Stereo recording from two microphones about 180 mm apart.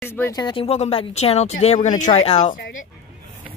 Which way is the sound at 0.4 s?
25° left (ahead or behind).